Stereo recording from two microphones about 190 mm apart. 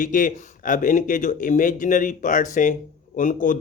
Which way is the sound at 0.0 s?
45° left (ahead or behind).